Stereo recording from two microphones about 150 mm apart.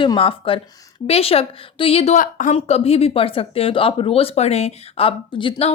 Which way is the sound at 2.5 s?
40° left (ahead or behind).